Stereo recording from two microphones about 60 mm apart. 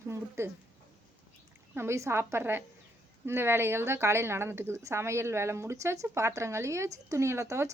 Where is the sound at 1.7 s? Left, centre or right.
Right.